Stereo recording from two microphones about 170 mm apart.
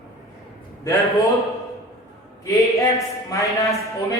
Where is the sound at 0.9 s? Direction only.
20° left (ahead or behind).